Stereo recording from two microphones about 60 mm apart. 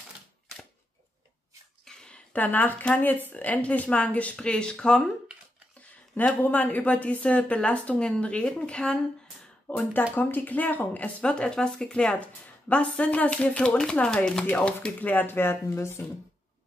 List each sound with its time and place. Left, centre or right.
1.9 s a sound: centre
2.3 s speech: left
5.8 s speech: left
9.7 s speech: left; by 14.4 s centre
15.0 s speech: left